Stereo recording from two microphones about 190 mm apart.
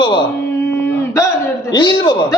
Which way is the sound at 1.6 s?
25° left (ahead or behind).